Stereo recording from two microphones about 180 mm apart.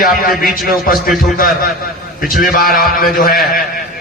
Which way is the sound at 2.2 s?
55° left (ahead or behind).